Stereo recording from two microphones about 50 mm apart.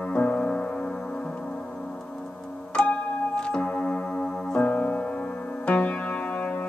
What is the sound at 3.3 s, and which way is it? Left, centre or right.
Music, centre.